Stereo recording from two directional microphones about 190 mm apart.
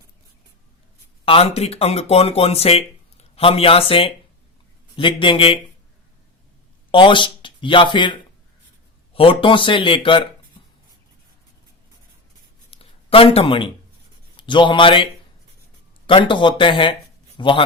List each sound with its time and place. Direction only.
1.2 s speech: 30° left (ahead or behind)
6.9 s speech: 25° left (ahead or behind)
12.7 s a sound: 30° left (ahead or behind)
14.3 s a man's voice: 25° left (ahead or behind)